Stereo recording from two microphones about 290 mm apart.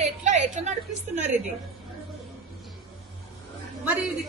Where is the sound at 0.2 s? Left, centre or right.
Right.